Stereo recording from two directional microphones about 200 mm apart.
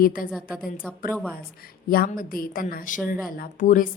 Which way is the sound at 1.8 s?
45° left (ahead or behind).